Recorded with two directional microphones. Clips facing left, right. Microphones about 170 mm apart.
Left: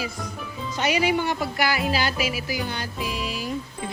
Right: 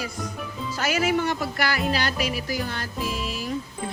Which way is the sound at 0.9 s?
Centre (ahead or behind).